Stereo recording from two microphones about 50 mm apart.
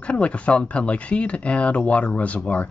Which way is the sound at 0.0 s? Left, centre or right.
Left.